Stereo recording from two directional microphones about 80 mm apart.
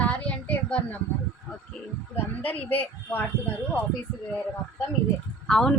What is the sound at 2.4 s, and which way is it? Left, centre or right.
Speech, left.